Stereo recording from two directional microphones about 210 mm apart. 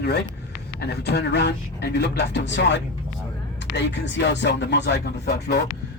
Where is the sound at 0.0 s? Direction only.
50° left (ahead or behind).